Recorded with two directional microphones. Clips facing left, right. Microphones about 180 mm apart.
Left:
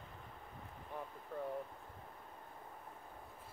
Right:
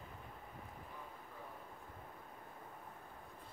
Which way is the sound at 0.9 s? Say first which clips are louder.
Left 9 dB; 60° left (ahead or behind).